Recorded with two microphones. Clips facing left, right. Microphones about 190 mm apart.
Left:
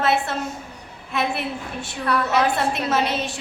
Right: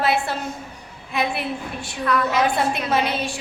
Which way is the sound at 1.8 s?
30° left (ahead or behind).